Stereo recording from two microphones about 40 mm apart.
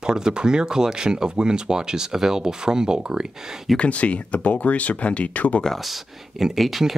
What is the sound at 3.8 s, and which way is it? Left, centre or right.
Speech, left.